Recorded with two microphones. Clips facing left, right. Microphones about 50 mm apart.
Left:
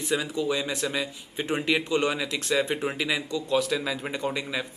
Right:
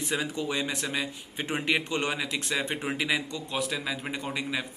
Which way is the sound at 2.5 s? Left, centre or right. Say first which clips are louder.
Left 6 dB; centre.